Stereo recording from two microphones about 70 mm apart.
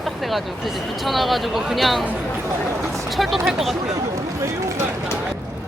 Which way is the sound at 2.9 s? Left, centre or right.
Centre.